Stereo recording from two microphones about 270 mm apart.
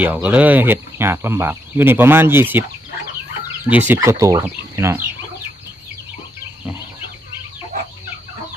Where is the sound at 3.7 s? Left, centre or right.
Centre.